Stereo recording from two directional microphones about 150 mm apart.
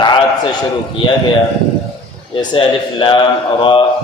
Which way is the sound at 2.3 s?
35° left (ahead or behind).